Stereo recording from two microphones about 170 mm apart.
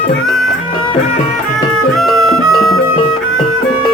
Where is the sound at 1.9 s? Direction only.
Centre (ahead or behind).